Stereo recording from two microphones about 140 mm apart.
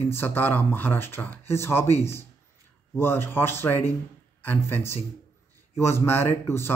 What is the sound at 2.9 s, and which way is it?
Speech, 15° left (ahead or behind).